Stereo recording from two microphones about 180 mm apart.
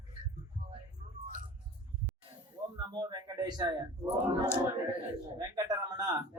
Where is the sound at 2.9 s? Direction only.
25° right (ahead or behind).